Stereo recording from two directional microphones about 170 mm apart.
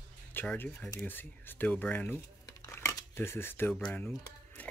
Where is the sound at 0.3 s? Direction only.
10° left (ahead or behind).